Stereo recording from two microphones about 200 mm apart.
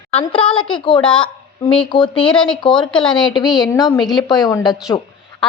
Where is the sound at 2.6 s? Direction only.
25° left (ahead or behind).